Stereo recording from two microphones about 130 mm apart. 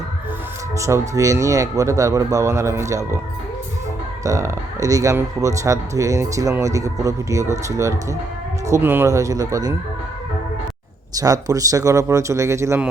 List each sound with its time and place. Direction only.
0.8 s speech: 25° right (ahead or behind)
4.2 s speech: 25° right (ahead or behind)
11.1 s speech: 30° right (ahead or behind)